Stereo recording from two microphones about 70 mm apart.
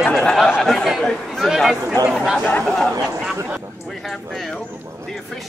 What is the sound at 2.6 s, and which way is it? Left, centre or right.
Speech, centre.